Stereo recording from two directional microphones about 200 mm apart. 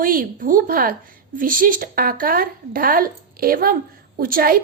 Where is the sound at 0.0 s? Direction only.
45° right (ahead or behind).